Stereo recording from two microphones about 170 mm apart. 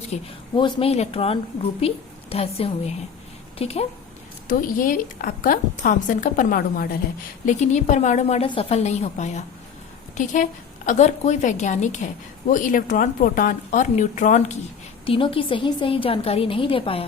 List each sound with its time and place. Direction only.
0.1 s a woman's voice: 30° left (ahead or behind)
4.4 s a woman's voice: 55° left (ahead or behind)
7.4 s a woman's voice: 45° left (ahead or behind)
15.0 s a woman's voice: 30° left (ahead or behind)